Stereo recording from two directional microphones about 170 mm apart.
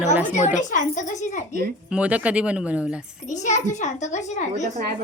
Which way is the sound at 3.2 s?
45° left (ahead or behind).